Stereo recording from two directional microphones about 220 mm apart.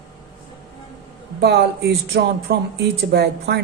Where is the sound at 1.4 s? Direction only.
50° right (ahead or behind).